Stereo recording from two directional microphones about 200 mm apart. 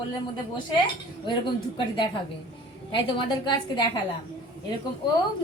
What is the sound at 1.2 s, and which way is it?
A woman's voice, 25° left (ahead or behind).